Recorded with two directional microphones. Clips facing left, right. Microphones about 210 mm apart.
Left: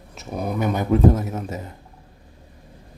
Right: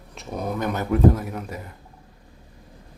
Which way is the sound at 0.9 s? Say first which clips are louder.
Left 1 dB; 25° left (ahead or behind).